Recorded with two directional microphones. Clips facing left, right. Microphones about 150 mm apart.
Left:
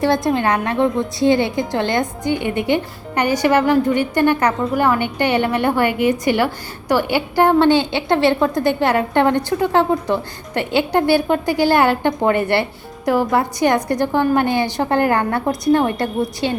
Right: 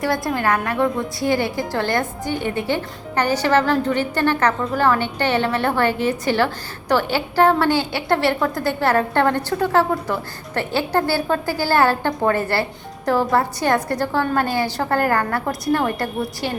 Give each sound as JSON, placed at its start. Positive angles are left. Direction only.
{"t": 0.0, "sound": "a woman's voice", "side_deg": 20}